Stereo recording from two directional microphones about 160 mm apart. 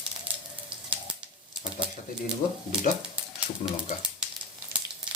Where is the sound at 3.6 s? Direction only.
40° left (ahead or behind).